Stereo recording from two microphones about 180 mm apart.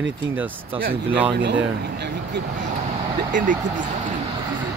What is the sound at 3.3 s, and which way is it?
Speech, 45° right (ahead or behind).